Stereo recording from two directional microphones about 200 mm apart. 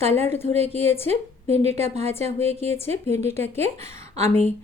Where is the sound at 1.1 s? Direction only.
30° right (ahead or behind).